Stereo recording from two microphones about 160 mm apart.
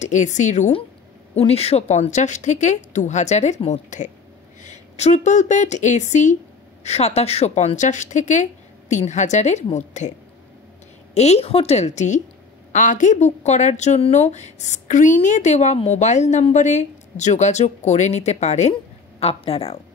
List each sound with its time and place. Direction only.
0.0 s speech: 50° left (ahead or behind)
11.1 s speech: 40° left (ahead or behind)